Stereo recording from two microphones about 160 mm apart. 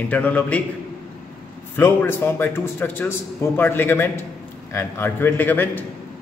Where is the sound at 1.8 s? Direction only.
15° left (ahead or behind).